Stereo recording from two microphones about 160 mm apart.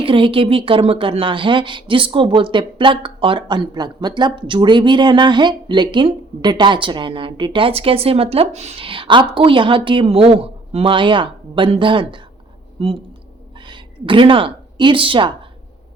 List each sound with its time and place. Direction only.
0.0 s a woman's voice: 35° right (ahead or behind)